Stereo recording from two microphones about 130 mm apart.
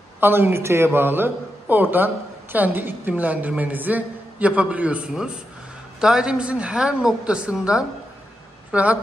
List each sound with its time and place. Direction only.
0.2 s a woman's voice: 20° right (ahead or behind)